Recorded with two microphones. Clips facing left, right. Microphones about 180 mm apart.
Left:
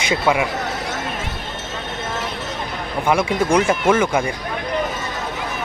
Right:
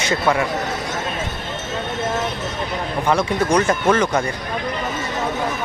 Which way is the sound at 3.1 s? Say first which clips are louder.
Left 1 dB; 10° left (ahead or behind).